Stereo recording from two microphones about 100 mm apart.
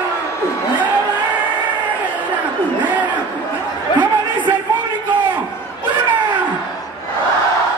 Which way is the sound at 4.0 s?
50° right (ahead or behind).